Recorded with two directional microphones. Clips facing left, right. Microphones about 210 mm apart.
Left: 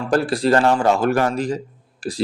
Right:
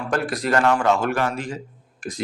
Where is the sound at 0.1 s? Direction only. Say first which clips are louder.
Left 5 dB; 30° left (ahead or behind).